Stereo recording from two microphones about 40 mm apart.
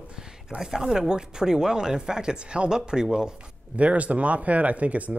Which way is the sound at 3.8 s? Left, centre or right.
Right.